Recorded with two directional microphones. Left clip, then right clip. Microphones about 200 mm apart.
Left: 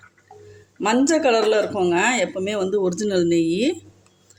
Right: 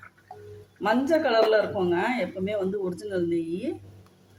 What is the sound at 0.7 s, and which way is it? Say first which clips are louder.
A man's voice: left 4 dB; 45° left (ahead or behind).